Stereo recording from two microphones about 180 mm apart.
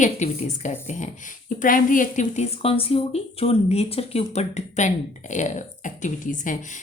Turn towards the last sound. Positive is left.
turn(degrees=45)  # may be behind; listen again after turning